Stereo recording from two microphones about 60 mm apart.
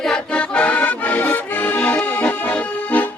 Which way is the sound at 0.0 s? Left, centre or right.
Centre.